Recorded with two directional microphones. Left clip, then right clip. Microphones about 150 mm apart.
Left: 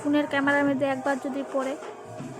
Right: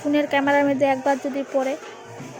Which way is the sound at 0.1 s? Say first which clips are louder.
Right 4 dB; 15° right (ahead or behind).